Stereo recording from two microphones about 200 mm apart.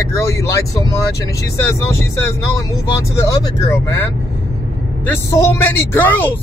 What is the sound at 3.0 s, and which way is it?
Speech, 15° left (ahead or behind).